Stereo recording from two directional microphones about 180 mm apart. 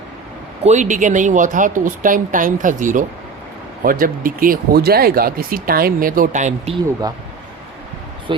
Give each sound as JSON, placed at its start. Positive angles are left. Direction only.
{"t": 0.6, "sound": "speech", "side_deg": -40}
{"t": 8.3, "sound": "speech", "side_deg": -25}